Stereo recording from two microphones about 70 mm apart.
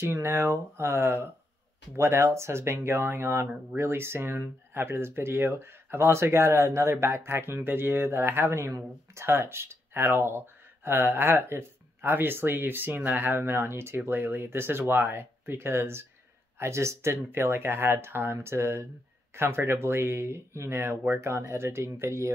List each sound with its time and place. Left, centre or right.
0.0 s speech: right